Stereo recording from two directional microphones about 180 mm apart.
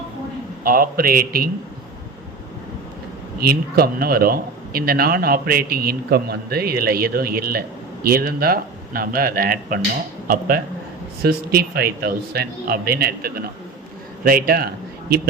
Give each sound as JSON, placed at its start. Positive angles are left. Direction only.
{"t": 0.6, "sound": "speech", "side_deg": -55}
{"t": 3.4, "sound": "a man's voice", "side_deg": -60}